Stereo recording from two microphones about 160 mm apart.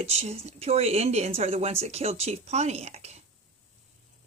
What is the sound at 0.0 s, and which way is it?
Speech, 40° right (ahead or behind).